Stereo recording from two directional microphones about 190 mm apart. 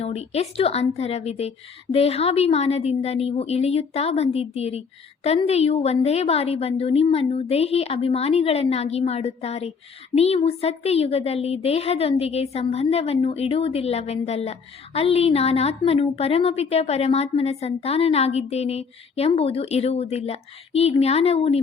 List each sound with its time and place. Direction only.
0.0 s a woman's voice: 35° left (ahead or behind)